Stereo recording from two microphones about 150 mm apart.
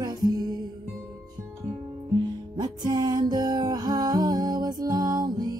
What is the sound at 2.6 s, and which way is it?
Music, 25° right (ahead or behind).